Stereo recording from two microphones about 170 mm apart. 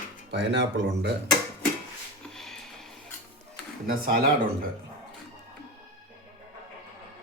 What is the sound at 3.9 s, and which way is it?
Speech, 60° right (ahead or behind).